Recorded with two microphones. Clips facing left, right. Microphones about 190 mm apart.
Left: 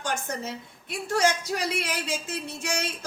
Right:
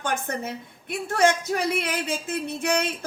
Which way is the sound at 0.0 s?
55° right (ahead or behind).